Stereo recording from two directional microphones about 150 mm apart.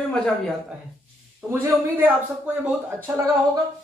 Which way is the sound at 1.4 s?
15° right (ahead or behind).